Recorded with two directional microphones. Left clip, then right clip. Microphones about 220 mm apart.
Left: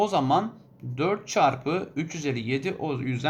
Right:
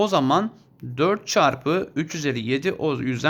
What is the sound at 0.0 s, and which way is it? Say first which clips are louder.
Speech: right 3 dB; 45° right (ahead or behind).